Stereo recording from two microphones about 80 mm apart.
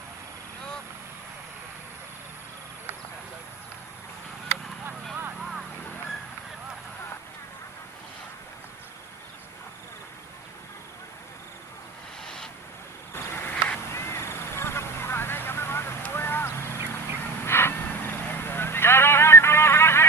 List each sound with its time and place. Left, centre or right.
5.4 s vehicle: centre
12.2 s vehicle: centre
13.5 s a sound: centre
13.9 s vehicle: left
16.1 s a sound: left
17.4 s vehicle: left